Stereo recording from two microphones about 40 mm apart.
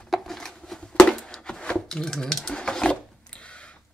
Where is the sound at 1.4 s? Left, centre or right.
Left.